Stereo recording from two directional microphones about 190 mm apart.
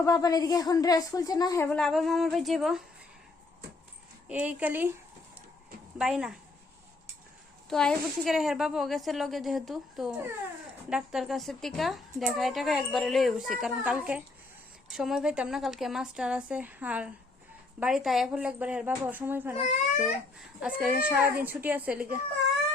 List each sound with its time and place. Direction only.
0.0 s a woman's voice: 20° left (ahead or behind)
1.7 s a woman's voice: centre (ahead or behind)
4.3 s a woman's voice: 5° right (ahead or behind)
6.0 s a woman's voice: 5° right (ahead or behind)
7.7 s a woman's voice: centre (ahead or behind)